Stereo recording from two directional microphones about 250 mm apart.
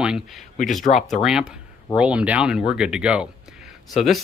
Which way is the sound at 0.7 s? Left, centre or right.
Centre.